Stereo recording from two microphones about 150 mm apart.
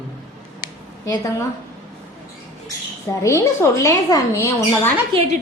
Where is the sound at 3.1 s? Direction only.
20° left (ahead or behind).